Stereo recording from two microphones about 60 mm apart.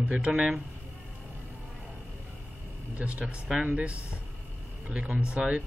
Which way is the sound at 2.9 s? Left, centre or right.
Right.